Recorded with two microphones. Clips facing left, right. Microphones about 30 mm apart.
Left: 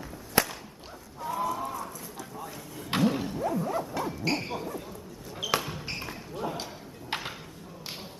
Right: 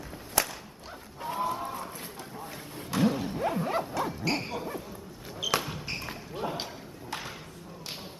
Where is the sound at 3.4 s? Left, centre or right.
Right.